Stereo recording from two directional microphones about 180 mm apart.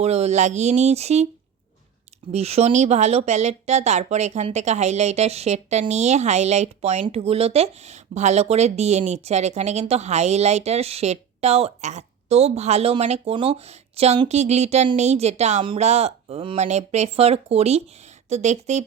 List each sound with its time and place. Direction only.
0.0 s speech: 35° right (ahead or behind)
2.3 s speech: 35° right (ahead or behind)